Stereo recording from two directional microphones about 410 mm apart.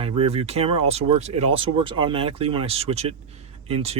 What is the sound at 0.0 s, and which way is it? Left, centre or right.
Speech, centre.